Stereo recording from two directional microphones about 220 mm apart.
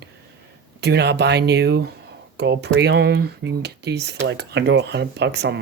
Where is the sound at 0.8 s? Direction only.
50° right (ahead or behind).